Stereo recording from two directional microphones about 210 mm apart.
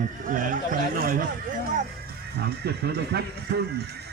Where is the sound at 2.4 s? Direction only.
50° right (ahead or behind).